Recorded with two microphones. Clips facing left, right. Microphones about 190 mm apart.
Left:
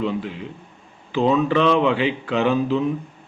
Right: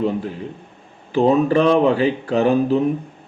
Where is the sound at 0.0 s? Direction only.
40° right (ahead or behind).